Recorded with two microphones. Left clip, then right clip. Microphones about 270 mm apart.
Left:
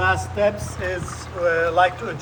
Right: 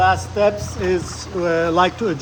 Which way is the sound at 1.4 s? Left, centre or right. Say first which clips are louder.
Right 1 dB; right.